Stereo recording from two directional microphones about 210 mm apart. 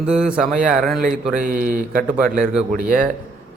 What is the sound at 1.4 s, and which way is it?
Speech, 40° right (ahead or behind).